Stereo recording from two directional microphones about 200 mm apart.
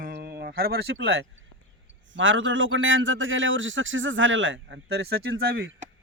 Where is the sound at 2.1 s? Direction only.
70° right (ahead or behind).